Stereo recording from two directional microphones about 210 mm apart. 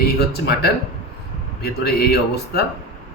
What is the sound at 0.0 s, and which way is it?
Speech, 50° left (ahead or behind).